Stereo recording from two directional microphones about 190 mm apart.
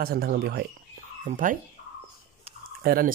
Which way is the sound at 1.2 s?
45° right (ahead or behind).